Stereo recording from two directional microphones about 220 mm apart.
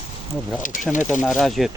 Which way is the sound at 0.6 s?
35° left (ahead or behind).